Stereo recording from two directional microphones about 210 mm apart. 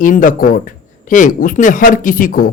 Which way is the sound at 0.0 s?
40° left (ahead or behind).